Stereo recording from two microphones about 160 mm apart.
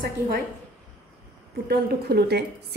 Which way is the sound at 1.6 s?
85° right.